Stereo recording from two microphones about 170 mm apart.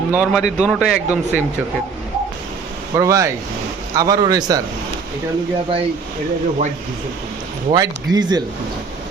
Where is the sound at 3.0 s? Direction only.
20° right (ahead or behind).